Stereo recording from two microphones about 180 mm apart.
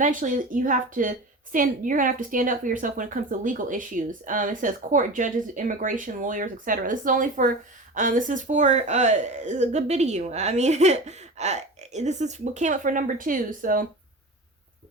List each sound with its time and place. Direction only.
0.0 s a woman's voice: 45° right (ahead or behind)